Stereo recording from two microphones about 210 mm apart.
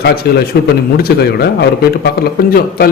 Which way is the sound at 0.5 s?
50° left (ahead or behind).